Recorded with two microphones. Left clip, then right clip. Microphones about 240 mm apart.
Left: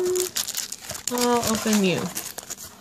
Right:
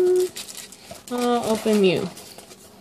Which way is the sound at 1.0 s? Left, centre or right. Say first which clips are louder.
Even; left.